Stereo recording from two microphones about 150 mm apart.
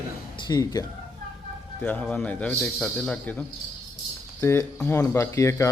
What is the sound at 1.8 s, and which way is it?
Speech, 10° left (ahead or behind).